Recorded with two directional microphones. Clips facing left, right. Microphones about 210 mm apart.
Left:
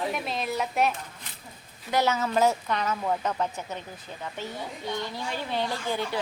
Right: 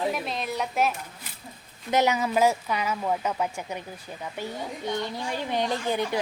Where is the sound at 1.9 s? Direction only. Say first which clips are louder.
Right 2 dB; 15° right (ahead or behind).